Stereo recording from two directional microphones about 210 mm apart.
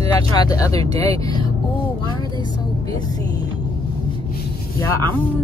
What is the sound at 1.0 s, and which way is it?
Vehicle, 15° left (ahead or behind).